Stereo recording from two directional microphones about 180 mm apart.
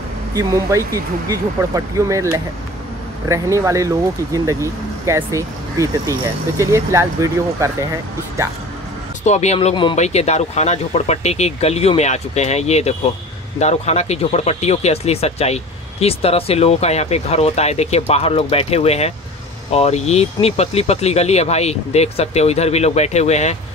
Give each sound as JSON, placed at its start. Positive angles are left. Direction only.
{"t": 0.3, "sound": "speech", "side_deg": -20}
{"t": 9.2, "sound": "speech", "side_deg": 40}